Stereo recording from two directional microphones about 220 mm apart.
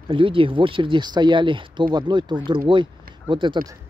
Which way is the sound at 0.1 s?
25° right (ahead or behind).